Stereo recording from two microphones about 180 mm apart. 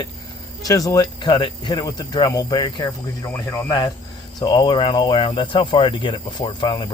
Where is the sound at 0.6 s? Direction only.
20° left (ahead or behind).